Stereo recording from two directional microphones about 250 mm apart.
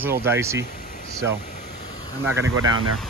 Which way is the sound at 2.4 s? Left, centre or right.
Right.